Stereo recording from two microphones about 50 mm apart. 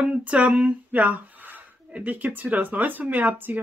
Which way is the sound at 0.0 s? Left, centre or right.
Right.